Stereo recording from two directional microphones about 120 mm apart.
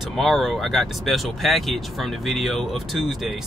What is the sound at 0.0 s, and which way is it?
Speech, centre (ahead or behind).